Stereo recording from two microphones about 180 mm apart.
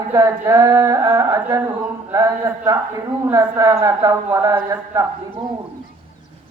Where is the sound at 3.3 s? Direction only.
20° right (ahead or behind).